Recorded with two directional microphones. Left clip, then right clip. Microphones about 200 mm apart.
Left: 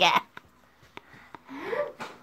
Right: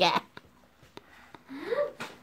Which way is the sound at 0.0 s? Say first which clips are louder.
Left 3 dB; 20° right (ahead or behind).